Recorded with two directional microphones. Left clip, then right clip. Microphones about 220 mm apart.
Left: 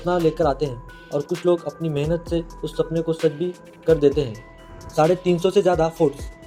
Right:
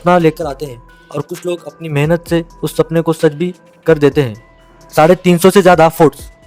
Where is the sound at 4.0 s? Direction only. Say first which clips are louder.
Right 7 dB; 90° right.